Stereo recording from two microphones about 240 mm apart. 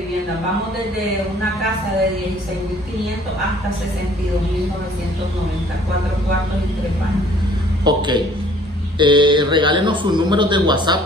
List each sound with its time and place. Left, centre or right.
7.8 s a man's voice: centre